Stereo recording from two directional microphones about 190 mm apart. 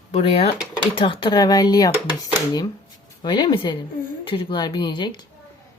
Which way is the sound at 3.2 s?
25° left (ahead or behind).